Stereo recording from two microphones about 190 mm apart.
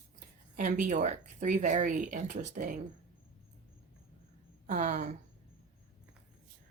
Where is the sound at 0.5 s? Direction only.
45° right (ahead or behind).